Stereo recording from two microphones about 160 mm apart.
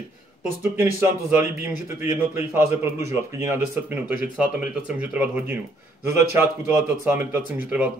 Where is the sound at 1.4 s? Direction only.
15° right (ahead or behind).